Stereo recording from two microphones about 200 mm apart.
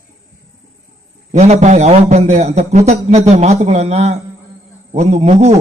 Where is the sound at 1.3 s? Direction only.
35° right (ahead or behind).